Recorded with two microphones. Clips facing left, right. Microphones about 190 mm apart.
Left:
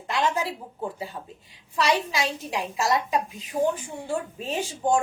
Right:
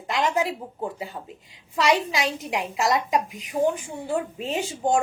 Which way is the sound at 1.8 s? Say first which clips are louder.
Right 2 dB; 20° right (ahead or behind).